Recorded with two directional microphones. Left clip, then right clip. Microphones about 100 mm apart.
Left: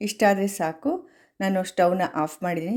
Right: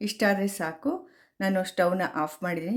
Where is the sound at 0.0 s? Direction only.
30° left (ahead or behind).